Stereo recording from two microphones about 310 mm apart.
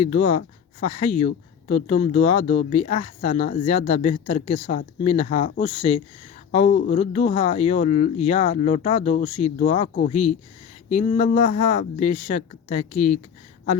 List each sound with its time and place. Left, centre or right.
0.0 s speech: left